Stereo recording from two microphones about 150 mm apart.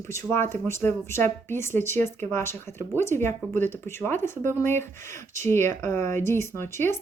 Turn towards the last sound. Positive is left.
turn(degrees=15)  # may be behind; listen again after turning